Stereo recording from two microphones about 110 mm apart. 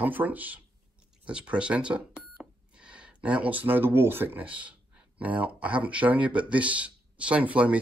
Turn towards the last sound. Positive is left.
turn(degrees=-10)  # may be behind; listen again after turning